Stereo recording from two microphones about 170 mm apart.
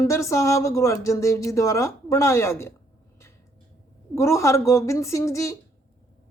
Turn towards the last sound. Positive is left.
turn(degrees=20)  # may be behind; listen again after turning